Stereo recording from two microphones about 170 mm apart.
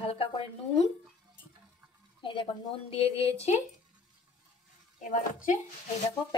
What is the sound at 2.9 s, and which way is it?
Speech, 35° left (ahead or behind).